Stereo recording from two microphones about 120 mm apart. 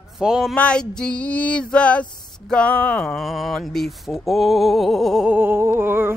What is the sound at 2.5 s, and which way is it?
Speech, 10° left (ahead or behind).